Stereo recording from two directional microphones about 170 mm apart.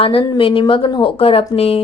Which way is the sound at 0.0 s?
35° left (ahead or behind).